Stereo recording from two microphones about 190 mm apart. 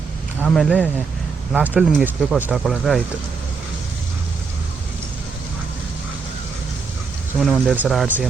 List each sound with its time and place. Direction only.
0.4 s speech: centre (ahead or behind)
7.3 s speech: centre (ahead or behind)